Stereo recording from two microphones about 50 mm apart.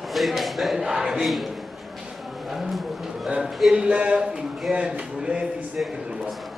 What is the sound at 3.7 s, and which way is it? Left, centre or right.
Speech, centre.